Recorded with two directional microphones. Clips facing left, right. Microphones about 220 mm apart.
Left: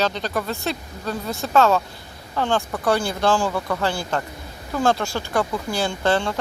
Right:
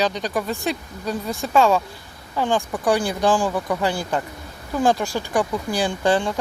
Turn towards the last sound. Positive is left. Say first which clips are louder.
# right 1 dB
turn(degrees=-15)  # may be behind; listen again after turning